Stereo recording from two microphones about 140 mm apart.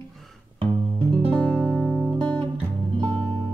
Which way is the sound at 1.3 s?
5° left (ahead or behind).